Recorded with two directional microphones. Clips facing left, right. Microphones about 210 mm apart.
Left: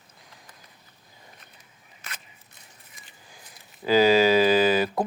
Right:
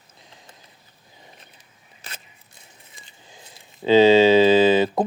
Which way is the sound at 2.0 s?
30° right (ahead or behind).